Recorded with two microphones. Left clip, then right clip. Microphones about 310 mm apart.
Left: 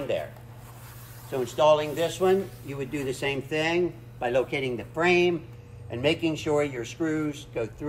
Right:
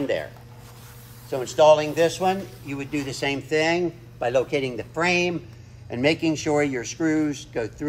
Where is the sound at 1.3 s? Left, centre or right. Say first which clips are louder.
Right 5 dB; right.